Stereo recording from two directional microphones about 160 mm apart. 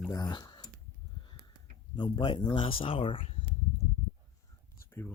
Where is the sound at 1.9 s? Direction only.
30° left (ahead or behind).